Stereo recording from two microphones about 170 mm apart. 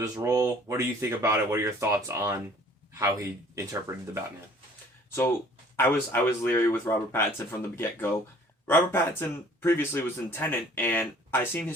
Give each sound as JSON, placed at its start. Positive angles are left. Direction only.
{"t": 0.0, "sound": "speech", "side_deg": -20}
{"t": 5.7, "sound": "a man's voice", "side_deg": 15}